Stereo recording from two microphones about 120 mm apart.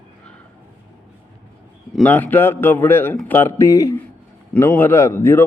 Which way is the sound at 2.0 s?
15° left (ahead or behind).